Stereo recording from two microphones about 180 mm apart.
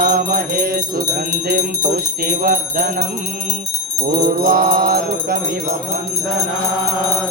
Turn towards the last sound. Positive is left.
turn(degrees=-55)  # may be behind; listen again after turning